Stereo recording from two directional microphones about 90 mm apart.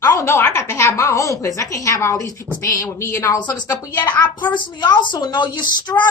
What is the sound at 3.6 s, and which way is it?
A woman's voice, 45° left (ahead or behind).